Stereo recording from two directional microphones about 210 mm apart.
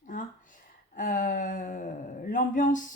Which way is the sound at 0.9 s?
40° left (ahead or behind).